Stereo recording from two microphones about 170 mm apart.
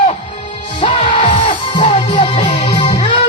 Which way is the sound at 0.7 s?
30° left (ahead or behind).